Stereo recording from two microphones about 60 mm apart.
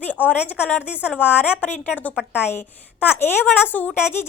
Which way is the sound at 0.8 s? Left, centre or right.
Right.